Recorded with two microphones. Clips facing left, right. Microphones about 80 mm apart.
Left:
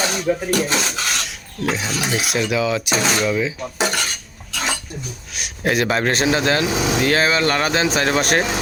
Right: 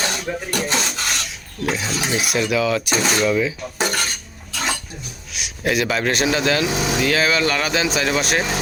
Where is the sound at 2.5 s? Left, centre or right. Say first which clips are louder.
Right 1 dB; left.